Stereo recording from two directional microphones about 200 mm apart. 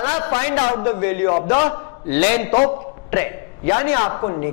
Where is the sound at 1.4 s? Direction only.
30° left (ahead or behind).